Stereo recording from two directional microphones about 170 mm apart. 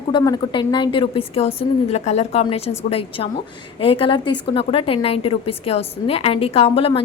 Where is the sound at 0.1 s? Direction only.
25° left (ahead or behind).